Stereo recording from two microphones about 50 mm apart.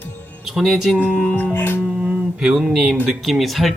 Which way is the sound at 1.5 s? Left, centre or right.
Left.